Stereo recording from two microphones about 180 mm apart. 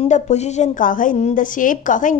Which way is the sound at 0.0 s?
40° left (ahead or behind).